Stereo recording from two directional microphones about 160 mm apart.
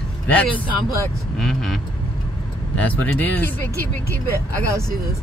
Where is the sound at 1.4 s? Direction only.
Centre (ahead or behind).